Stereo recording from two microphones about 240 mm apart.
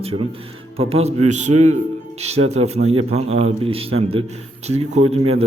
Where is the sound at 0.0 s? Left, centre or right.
Right.